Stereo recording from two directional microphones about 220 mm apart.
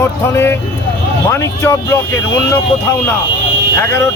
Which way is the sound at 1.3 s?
10° left (ahead or behind).